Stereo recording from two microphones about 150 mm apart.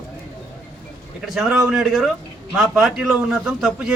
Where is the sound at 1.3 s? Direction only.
5° right (ahead or behind).